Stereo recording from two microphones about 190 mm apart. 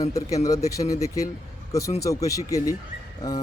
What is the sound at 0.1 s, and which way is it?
A man's voice, 15° left (ahead or behind).